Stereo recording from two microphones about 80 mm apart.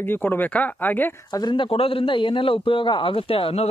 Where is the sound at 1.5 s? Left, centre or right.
Left.